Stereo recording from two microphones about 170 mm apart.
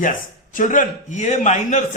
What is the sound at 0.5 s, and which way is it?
A man's voice, 50° left (ahead or behind).